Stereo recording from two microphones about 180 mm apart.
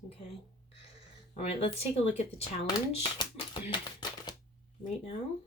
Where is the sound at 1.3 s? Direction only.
35° left (ahead or behind).